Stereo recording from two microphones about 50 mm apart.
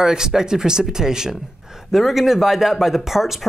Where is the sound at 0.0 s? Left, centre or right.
Centre.